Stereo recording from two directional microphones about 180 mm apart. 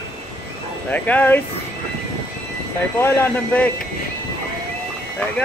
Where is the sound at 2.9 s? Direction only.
10° left (ahead or behind).